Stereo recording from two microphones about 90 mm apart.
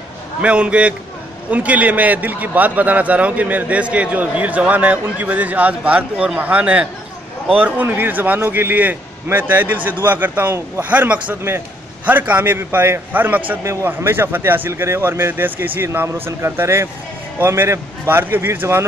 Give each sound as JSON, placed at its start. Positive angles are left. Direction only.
{"t": 0.4, "sound": "a man's voice", "side_deg": -15}